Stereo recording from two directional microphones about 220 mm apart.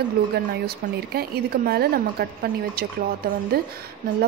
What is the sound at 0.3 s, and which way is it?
Speech, 45° right (ahead or behind).